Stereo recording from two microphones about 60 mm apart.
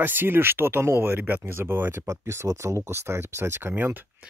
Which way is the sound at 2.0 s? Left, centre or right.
Right.